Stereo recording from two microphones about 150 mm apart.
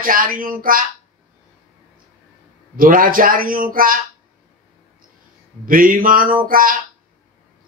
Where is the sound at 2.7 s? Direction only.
70° right (ahead or behind).